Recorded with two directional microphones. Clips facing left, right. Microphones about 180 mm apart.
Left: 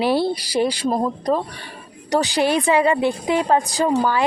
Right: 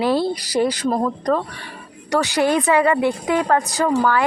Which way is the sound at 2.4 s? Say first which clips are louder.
Right 2 dB; 15° left (ahead or behind).